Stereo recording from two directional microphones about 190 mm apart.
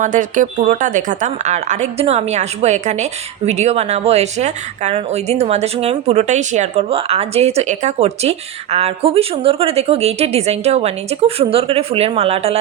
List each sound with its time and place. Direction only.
0.0 s speech: 40° right (ahead or behind)